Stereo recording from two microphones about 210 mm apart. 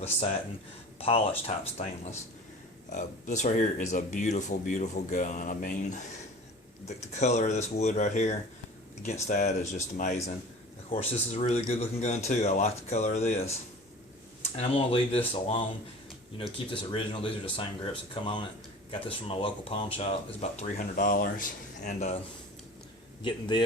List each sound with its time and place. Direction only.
0.0 s speech: 30° left (ahead or behind)
7.1 s speech: 35° left (ahead or behind)
10.9 s speech: 30° left (ahead or behind)
23.2 s speech: 20° left (ahead or behind)